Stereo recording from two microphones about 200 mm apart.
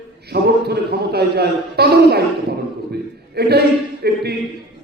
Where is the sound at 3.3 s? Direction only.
55° right (ahead or behind).